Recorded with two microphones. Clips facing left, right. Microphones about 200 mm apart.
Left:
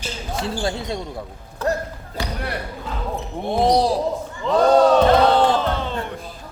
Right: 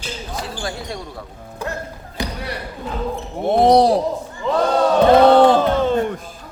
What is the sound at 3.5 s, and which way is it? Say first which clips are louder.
Speech: right 5 dB; 60° right (ahead or behind).